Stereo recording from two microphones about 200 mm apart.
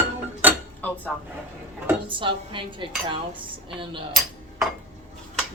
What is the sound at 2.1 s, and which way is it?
Speech, 25° right (ahead or behind).